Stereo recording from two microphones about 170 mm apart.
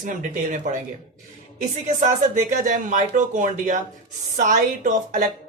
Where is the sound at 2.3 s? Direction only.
50° right (ahead or behind).